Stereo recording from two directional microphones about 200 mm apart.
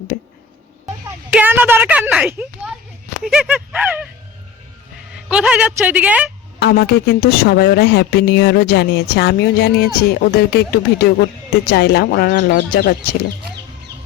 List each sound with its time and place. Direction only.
0.1 s a sound: 55° left (ahead or behind)
1.3 s a woman's voice: 10° right (ahead or behind)
5.3 s a woman's voice: 5° right (ahead or behind)
6.6 s speech: 55° left (ahead or behind)